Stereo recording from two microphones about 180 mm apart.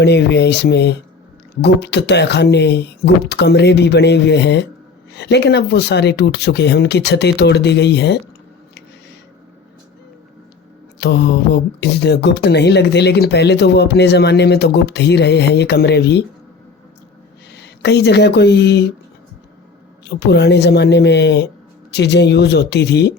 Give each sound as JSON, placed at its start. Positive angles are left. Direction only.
{"t": 0.0, "sound": "speech", "side_deg": 70}
{"t": 11.0, "sound": "speech", "side_deg": 70}
{"t": 17.5, "sound": "speech", "side_deg": 70}
{"t": 20.1, "sound": "speech", "side_deg": 70}